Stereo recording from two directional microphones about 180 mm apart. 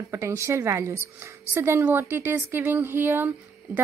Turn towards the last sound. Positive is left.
turn(degrees=-10)  # may be behind; listen again after turning